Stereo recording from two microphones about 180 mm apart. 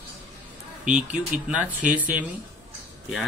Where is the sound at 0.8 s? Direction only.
5° right (ahead or behind).